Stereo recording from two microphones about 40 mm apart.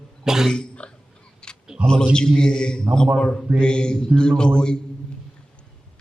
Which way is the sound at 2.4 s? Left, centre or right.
Centre.